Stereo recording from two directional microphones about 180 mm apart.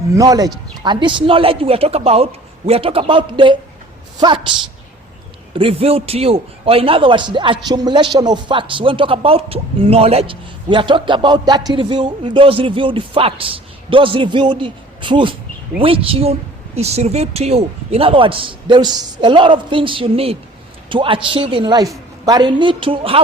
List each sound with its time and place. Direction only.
0.2 s a man's voice: 20° right (ahead or behind)
5.5 s a man's voice: 30° right (ahead or behind)